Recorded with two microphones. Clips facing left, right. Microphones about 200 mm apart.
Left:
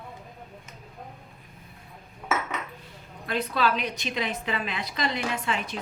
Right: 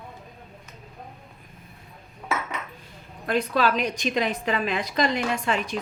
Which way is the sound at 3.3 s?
45° right (ahead or behind).